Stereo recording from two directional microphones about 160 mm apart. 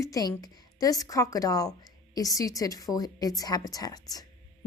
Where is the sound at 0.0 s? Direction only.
20° left (ahead or behind).